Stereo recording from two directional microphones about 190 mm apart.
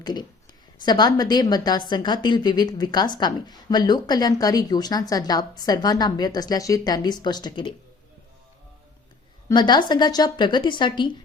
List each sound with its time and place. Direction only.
0.0 s a woman's voice: 20° left (ahead or behind)
9.5 s a woman's voice: 25° left (ahead or behind)